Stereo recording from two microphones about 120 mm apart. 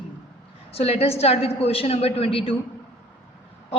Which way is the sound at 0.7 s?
55° left (ahead or behind).